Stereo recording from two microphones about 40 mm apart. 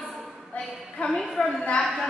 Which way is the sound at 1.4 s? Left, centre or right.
Left.